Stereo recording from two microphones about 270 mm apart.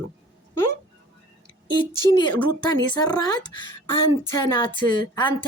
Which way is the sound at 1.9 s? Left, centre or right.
Centre.